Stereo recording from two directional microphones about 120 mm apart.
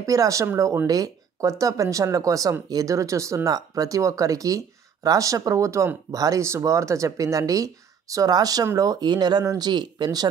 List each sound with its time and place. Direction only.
0.0 s speech: 30° right (ahead or behind)